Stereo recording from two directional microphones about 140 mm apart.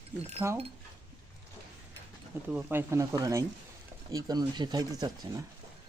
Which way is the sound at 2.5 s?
15° right (ahead or behind).